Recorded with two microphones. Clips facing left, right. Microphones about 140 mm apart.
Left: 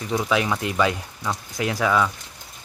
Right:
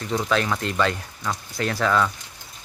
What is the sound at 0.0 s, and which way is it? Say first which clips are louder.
Speech: left 1 dB; 10° left (ahead or behind).